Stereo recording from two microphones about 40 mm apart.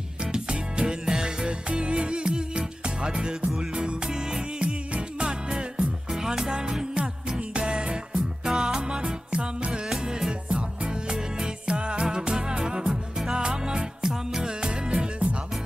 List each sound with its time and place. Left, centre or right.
0.2 s music: right
8.5 s music: centre
9.7 s music: centre; by 15.2 s right